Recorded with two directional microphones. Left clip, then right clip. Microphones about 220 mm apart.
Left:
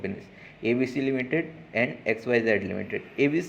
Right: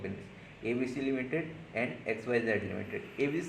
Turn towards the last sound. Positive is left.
turn(degrees=30)  # may be behind; listen again after turning